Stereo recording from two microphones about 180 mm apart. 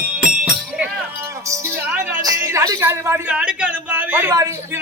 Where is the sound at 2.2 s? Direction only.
15° right (ahead or behind).